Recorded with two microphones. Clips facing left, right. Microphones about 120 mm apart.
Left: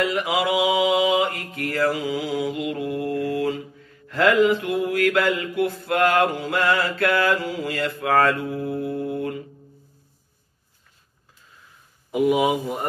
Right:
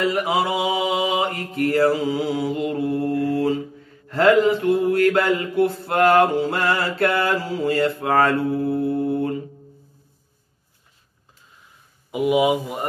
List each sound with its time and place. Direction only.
0.0 s mantra: 30° right (ahead or behind)
12.1 s speech: 5° right (ahead or behind)